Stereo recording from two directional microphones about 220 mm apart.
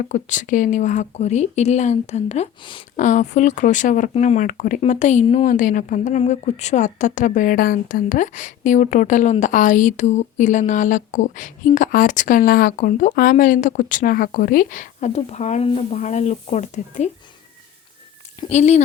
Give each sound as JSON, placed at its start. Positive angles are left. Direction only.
{"t": 0.0, "sound": "speech", "side_deg": 35}
{"t": 18.3, "sound": "speech", "side_deg": 30}